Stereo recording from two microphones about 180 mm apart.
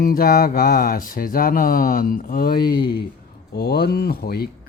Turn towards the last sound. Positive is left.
turn(degrees=60)  # may be behind; listen again after turning